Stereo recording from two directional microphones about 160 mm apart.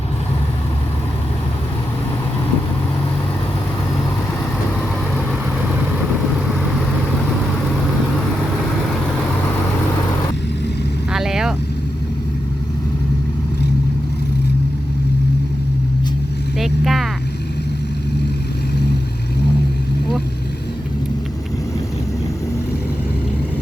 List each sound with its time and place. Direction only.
11.1 s vehicle: 5° right (ahead or behind)
16.6 s vehicle: centre (ahead or behind)